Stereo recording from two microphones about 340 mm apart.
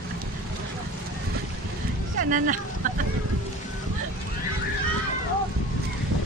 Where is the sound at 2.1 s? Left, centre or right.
Right.